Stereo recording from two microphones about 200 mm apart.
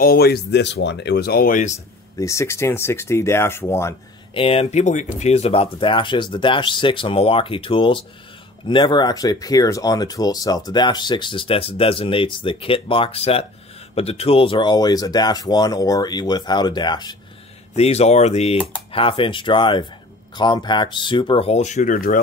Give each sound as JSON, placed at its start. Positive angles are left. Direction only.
{"t": 0.0, "sound": "speech", "side_deg": 50}
{"t": 2.1, "sound": "speech", "side_deg": 15}
{"t": 4.3, "sound": "speech", "side_deg": 30}
{"t": 17.7, "sound": "speech", "side_deg": 30}